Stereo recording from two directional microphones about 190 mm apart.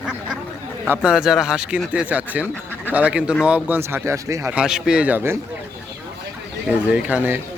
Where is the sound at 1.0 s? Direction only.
5° right (ahead or behind).